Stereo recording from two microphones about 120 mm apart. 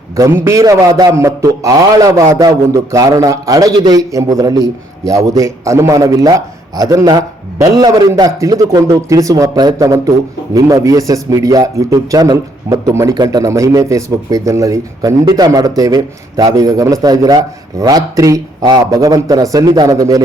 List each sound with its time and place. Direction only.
0.2 s a man's voice: 20° right (ahead or behind)